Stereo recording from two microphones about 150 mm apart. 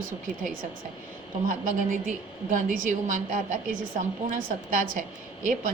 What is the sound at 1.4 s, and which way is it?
A woman's voice, 65° right (ahead or behind).